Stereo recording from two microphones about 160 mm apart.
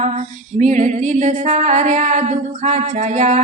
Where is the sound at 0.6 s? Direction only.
50° right (ahead or behind).